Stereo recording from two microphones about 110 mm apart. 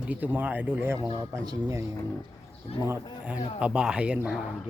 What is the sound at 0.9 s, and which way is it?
Speech, 35° right (ahead or behind).